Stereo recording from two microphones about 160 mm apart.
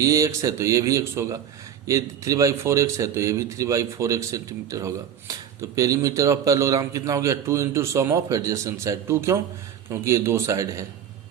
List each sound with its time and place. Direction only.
0.0 s speech: 20° right (ahead or behind)